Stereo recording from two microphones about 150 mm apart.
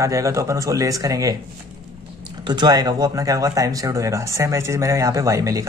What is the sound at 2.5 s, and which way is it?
Speech, 30° right (ahead or behind).